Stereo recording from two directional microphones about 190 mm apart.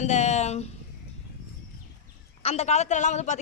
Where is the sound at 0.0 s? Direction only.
40° left (ahead or behind).